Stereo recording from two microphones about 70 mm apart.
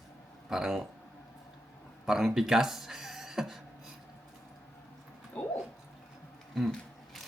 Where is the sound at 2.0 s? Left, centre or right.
Centre.